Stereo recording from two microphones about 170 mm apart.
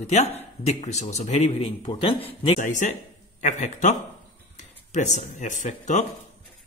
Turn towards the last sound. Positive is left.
turn(degrees=45)  # may be behind; listen again after turning